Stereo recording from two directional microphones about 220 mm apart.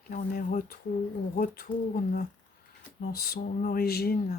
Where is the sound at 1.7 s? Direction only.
25° left (ahead or behind).